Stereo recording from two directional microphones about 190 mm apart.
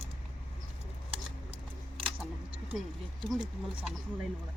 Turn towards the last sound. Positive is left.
turn(degrees=0)  # may be behind; listen again after turning